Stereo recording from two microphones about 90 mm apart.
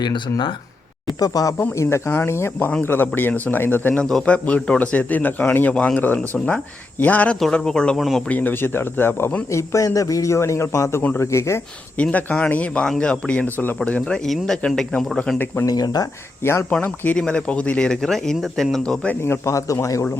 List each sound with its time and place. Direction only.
0.0 s speech: 60° left (ahead or behind)
1.2 s a man's voice: 40° left (ahead or behind); by 7.3 s 20° left (ahead or behind)
7.3 s speech: 5° left (ahead or behind)
8.3 s a man's voice: 20° left (ahead or behind)
11.9 s speech: 15° left (ahead or behind)
15.6 s speech: 45° left (ahead or behind)
16.4 s speech: 30° left (ahead or behind)
17.2 s speech: 10° left (ahead or behind)
19.2 s a man's voice: 30° left (ahead or behind)